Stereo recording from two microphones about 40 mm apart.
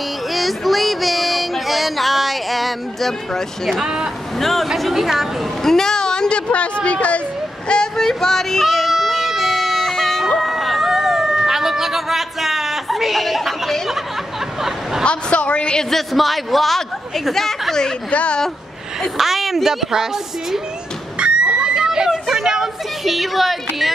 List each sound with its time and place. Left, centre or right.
0.3 s music: centre
3.7 s speech: centre
4.4 s speech: centre
5.6 s speech: centre; by 7.2 s left
7.6 s a sound: left
7.9 s music: centre
10.4 s a sound: centre
15.0 s a woman's voice: left
15.9 s speech: centre
18.1 s a woman's voice: left
19.1 s speech: centre
21.2 s neigh: right
22.1 s speech: centre